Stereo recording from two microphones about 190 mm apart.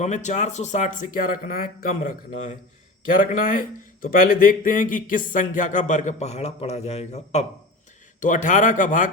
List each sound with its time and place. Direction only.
0.0 s a man's voice: 40° left (ahead or behind)